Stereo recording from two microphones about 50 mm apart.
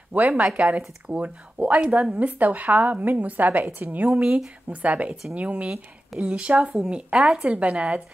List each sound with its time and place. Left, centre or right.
0.1 s a woman's voice: right
7.2 s a woman's voice: centre
7.4 s speech: right